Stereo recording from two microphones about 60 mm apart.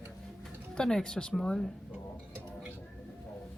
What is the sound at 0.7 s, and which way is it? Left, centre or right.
Speech, centre.